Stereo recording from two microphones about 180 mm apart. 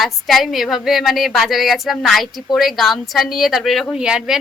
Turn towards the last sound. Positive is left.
turn(degrees=-5)  # may be behind; listen again after turning